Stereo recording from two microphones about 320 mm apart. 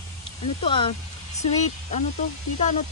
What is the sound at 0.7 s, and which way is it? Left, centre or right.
Speech, centre.